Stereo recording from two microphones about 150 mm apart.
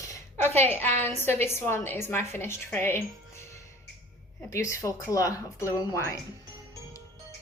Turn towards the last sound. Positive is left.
turn(degrees=20)  # may be behind; listen again after turning